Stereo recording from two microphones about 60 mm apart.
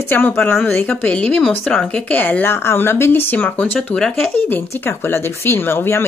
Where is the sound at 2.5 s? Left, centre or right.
Left.